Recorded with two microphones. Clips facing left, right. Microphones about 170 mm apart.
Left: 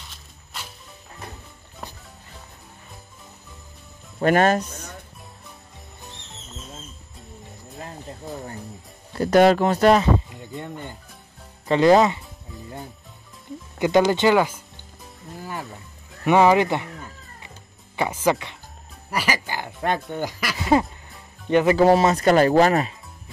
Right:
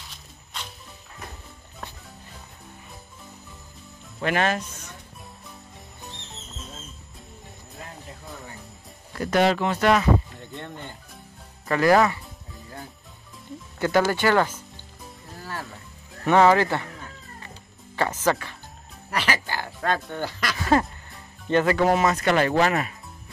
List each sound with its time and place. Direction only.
0.1 s music: 5° left (ahead or behind)
4.2 s speech: 45° left (ahead or behind)
9.1 s speech: 30° left (ahead or behind)
9.4 s speech: 45° left (ahead or behind)
10.3 s speech: 10° left (ahead or behind)
11.6 s speech: 20° left (ahead or behind)
13.7 s speech: 15° left (ahead or behind)
16.3 s speech: 15° left (ahead or behind)
17.9 s speech: 10° left (ahead or behind)
21.7 s speech: 30° left (ahead or behind)